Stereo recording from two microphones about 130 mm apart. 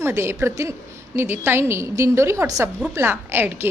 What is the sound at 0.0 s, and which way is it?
A woman's voice, 20° right (ahead or behind).